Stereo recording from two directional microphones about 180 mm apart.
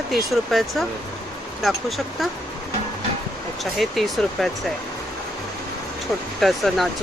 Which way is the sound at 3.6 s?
Centre (ahead or behind).